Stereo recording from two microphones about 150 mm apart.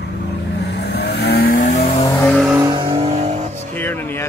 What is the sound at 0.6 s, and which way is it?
Vehicle, 90° left.